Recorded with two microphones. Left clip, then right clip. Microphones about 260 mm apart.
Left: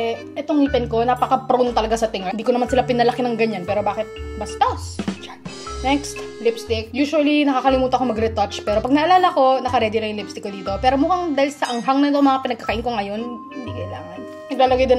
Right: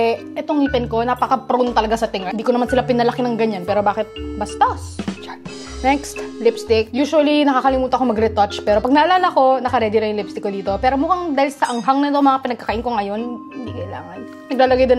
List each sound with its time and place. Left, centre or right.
0.4 s a woman's voice: right
5.8 s speech: centre
6.7 s a woman's voice: right
14.5 s speech: right